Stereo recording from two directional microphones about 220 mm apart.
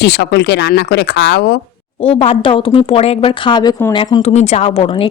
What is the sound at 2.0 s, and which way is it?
Speech, 25° left (ahead or behind).